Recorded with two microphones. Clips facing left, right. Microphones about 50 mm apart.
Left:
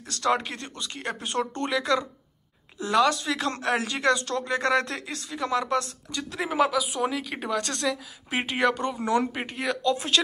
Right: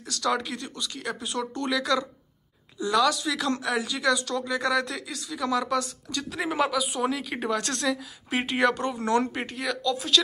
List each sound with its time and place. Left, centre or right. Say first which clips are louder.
0.0 s speech: left 2 dB; left
1.7 s speech: right 2 dB; left
6.3 s speech: left 2 dB; centre
9.6 s speech: left 3 dB; left